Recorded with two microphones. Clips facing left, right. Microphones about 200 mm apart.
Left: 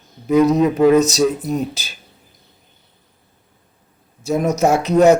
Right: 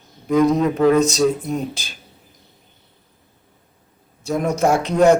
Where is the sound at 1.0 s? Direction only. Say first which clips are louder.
Left 1 dB; 5° left (ahead or behind).